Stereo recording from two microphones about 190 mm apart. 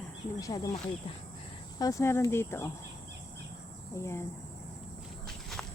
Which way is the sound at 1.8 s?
15° left (ahead or behind).